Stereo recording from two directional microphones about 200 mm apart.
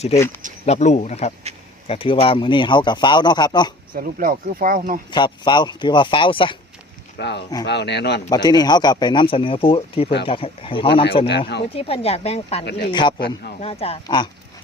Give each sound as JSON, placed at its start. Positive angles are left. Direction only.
{"t": 0.6, "sound": "a man's voice", "side_deg": 35}
{"t": 3.9, "sound": "speech", "side_deg": -45}
{"t": 5.1, "sound": "a man's voice", "side_deg": 20}
{"t": 7.2, "sound": "speech", "side_deg": 60}
{"t": 8.3, "sound": "a man's voice", "side_deg": 20}
{"t": 11.3, "sound": "speech", "side_deg": 55}
{"t": 11.7, "sound": "a man's voice", "side_deg": 30}
{"t": 13.1, "sound": "speech", "side_deg": 55}
{"t": 13.6, "sound": "a man's voice", "side_deg": 30}